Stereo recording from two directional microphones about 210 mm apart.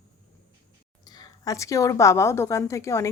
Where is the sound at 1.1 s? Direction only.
15° left (ahead or behind).